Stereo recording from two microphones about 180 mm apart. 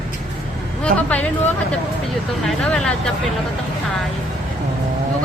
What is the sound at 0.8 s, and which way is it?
Speech, 5° left (ahead or behind).